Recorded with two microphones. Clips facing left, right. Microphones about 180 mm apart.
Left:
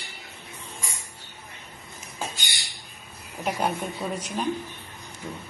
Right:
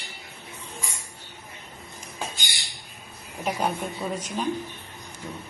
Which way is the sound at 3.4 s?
5° left (ahead or behind).